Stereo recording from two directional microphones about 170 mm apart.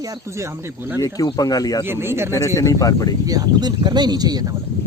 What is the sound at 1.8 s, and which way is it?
Speech, 15° right (ahead or behind).